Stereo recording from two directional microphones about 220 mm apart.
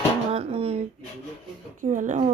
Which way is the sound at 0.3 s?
25° right (ahead or behind).